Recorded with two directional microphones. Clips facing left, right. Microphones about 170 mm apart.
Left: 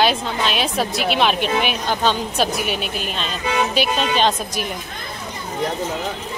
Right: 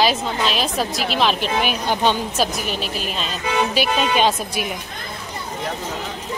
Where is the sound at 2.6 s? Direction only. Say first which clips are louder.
Left 1 dB; 5° left (ahead or behind).